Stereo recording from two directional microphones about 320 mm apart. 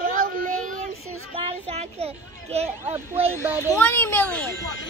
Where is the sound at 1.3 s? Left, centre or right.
Centre.